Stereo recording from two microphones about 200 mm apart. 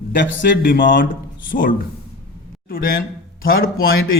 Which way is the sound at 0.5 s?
45° left (ahead or behind).